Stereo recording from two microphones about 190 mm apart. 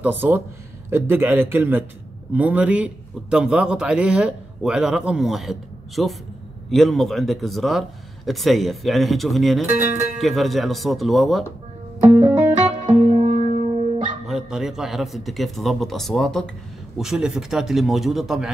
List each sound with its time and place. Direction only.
0.0 s a man's voice: 10° right (ahead or behind)
12.4 s music: 35° right (ahead or behind)
14.2 s a man's voice: centre (ahead or behind)